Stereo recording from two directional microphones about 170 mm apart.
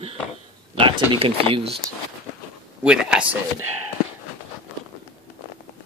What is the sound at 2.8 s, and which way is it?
Speech, 5° right (ahead or behind).